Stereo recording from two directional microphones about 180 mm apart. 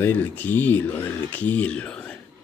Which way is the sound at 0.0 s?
10° left (ahead or behind).